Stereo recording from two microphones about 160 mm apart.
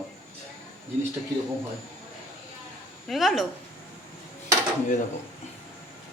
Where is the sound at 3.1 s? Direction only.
Centre (ahead or behind).